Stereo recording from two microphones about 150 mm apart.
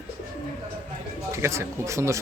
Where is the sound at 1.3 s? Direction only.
20° right (ahead or behind).